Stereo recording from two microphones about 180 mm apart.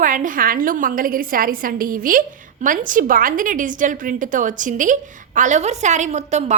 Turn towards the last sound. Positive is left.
turn(degrees=-40)  # may be behind; listen again after turning